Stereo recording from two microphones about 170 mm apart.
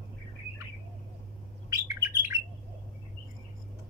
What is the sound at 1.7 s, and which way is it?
Bird, 20° right (ahead or behind).